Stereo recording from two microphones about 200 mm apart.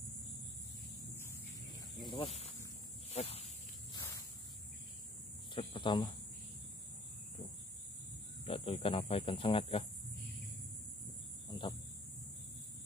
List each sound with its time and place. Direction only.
2.0 s speech: 30° left (ahead or behind)
3.1 s snake: 30° left (ahead or behind)
5.5 s cricket: 25° left (ahead or behind)
8.5 s speech: 25° left (ahead or behind)
11.4 s a sound: 25° left (ahead or behind)